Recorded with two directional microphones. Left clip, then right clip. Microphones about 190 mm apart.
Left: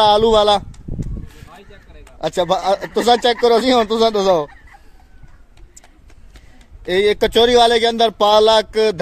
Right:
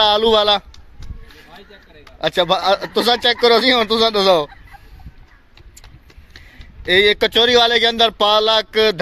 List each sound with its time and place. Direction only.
0.0 s speech: 15° left (ahead or behind)
1.6 s a sound: centre (ahead or behind)
2.1 s speech: 15° left (ahead or behind)
6.9 s speech: 15° left (ahead or behind)